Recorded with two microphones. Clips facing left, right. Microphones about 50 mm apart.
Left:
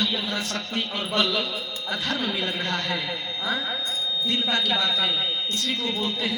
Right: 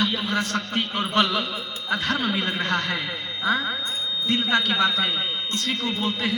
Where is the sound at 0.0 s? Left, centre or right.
Right.